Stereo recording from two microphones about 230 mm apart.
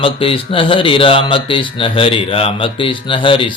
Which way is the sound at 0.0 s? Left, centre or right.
Left.